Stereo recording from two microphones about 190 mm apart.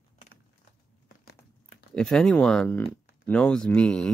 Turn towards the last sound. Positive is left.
turn(degrees=5)  # may be behind; listen again after turning